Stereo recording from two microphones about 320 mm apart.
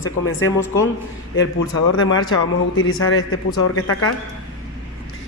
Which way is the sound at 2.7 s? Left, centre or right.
Left.